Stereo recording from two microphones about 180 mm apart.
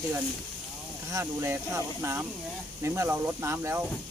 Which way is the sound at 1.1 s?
15° right (ahead or behind).